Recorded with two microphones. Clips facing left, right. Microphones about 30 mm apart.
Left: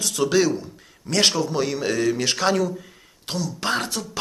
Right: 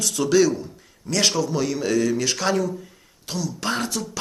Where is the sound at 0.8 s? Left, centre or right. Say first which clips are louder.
Left 1 dB; left.